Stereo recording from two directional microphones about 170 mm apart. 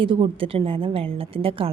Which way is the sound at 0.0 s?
30° right (ahead or behind).